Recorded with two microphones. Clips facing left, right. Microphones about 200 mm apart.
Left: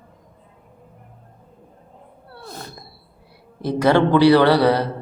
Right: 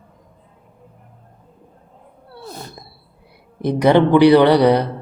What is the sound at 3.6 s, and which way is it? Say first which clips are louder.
Speech: right 3 dB; 20° right (ahead or behind).